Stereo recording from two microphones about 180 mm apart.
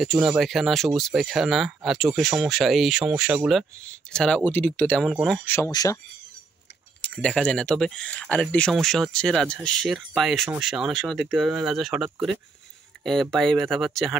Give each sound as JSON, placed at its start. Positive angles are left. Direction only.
{"t": 0.2, "sound": "speech", "side_deg": 0}
{"t": 5.5, "sound": "speech", "side_deg": 20}
{"t": 7.0, "sound": "speech", "side_deg": 5}